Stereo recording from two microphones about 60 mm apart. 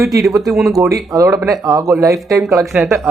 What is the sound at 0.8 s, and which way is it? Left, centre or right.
Speech, right.